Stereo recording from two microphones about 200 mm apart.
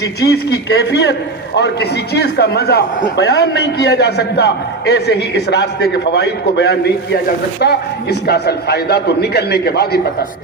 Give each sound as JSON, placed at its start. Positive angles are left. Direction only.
{"t": 0.2, "sound": "a man's voice", "side_deg": 55}